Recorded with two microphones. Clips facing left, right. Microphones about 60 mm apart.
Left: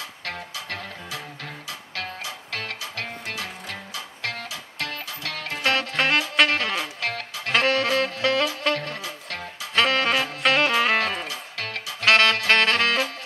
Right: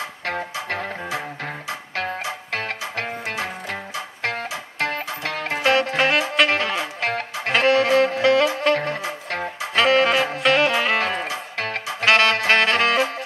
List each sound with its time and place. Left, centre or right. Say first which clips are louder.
0.2 s music: right 7 dB; right
5.6 s music: right 5 dB; centre
5.9 s saxophone: right 3 dB; centre
6.5 s music: right 3 dB; right
7.5 s music: right 5 dB; centre
9.8 s saxophone: right 4 dB; centre
10.4 s music: right 2 dB; centre
11.0 s music: right 3 dB; right
12.0 s music: right 1 dB; centre